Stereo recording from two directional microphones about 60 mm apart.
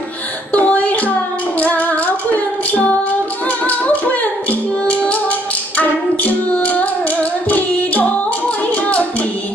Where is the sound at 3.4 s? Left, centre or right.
Left.